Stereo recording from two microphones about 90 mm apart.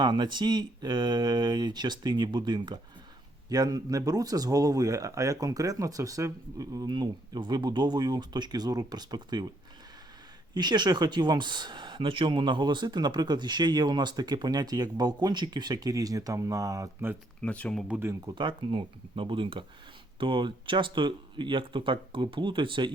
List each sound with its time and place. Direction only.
0.0 s speech: 55° right (ahead or behind)
6.9 s speech: 55° right (ahead or behind)
10.5 s speech: 50° right (ahead or behind)
17.4 s speech: 15° left (ahead or behind)
18.3 s speech: 65° right (ahead or behind)